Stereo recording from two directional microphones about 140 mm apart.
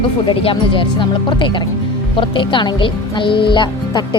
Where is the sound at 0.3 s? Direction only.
35° left (ahead or behind).